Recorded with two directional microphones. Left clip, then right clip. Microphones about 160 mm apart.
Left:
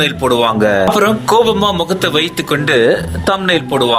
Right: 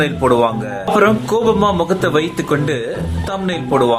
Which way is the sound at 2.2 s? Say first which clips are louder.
Left 2 dB; 55° left (ahead or behind).